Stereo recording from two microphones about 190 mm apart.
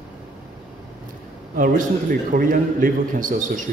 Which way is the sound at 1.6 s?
45° right (ahead or behind).